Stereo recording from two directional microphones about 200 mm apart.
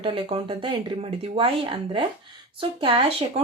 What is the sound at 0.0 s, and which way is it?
Speech, 25° right (ahead or behind).